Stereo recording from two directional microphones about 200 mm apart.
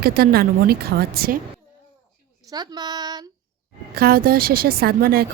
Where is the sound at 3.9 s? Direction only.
50° right (ahead or behind).